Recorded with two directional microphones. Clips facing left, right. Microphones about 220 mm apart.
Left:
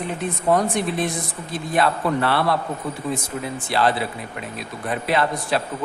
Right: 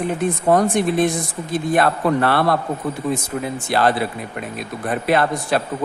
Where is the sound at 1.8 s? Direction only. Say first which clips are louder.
Right 2 dB; 50° right (ahead or behind).